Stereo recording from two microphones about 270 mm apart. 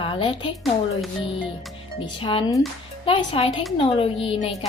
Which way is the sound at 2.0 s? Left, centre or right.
Centre.